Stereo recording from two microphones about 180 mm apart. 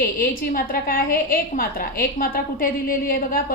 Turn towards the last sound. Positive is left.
turn(degrees=55)  # may be behind; listen again after turning